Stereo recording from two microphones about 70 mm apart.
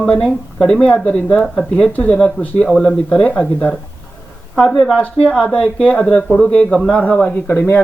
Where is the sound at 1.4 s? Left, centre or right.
Centre.